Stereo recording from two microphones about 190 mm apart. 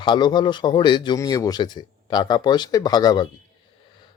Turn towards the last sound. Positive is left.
turn(degrees=20)  # may be behind; listen again after turning